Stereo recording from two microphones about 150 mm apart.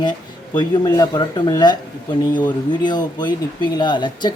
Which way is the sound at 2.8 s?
30° left (ahead or behind).